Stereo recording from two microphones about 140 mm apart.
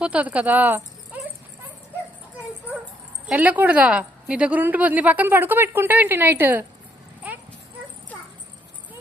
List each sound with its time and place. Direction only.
0.0 s a woman's voice: 10° right (ahead or behind)
3.2 s a woman's voice: 10° right (ahead or behind)